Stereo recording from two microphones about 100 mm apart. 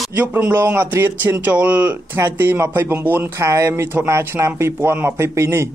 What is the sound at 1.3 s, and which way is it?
Speech, 10° right (ahead or behind).